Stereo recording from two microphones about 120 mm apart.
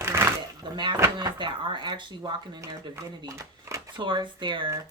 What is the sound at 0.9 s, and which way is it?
Speech, 25° right (ahead or behind).